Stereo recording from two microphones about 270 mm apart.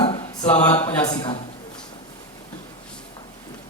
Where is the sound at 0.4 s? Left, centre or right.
Centre.